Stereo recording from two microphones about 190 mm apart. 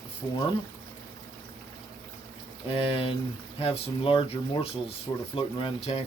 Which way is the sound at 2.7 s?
30° left (ahead or behind).